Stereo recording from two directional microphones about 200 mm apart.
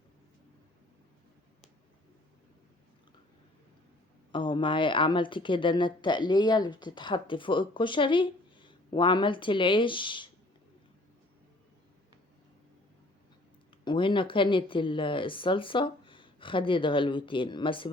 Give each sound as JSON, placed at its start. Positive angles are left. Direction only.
{"t": 4.3, "sound": "speech", "side_deg": 25}
{"t": 13.8, "sound": "speech", "side_deg": 25}